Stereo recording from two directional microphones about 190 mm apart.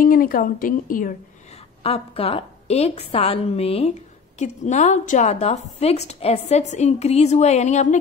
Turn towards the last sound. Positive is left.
turn(degrees=40)  # may be behind; listen again after turning